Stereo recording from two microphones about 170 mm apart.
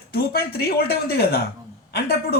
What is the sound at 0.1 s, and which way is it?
A woman's voice, 65° left (ahead or behind).